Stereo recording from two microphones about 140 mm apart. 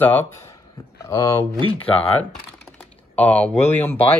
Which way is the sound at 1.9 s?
10° left (ahead or behind).